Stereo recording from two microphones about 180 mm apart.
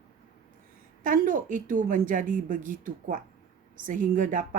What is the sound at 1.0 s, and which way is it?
Speech, 50° right (ahead or behind).